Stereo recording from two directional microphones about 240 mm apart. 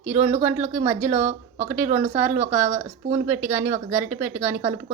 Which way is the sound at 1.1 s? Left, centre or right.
Right.